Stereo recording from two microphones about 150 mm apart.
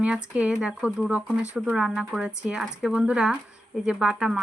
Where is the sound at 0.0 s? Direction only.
5° right (ahead or behind).